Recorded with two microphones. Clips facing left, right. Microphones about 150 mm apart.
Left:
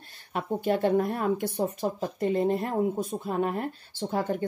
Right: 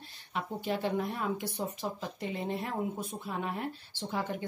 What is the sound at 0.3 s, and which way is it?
Speech, 50° left (ahead or behind).